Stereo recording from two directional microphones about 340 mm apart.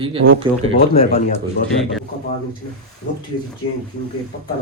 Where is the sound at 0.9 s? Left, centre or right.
Centre.